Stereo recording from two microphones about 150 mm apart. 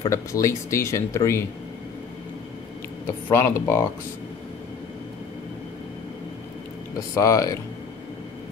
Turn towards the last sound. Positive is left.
turn(degrees=20)  # may be behind; listen again after turning